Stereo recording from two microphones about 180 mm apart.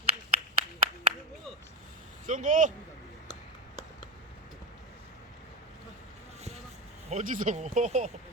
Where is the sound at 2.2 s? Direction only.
45° right (ahead or behind).